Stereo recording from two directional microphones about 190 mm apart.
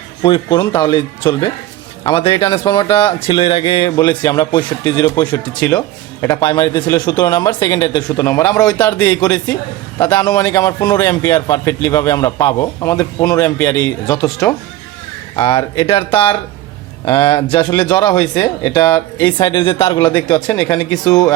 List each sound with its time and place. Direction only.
0.2 s speech: 25° left (ahead or behind)
2.9 s a man's voice: 15° left (ahead or behind)
3.2 s a man's voice: 25° left (ahead or behind)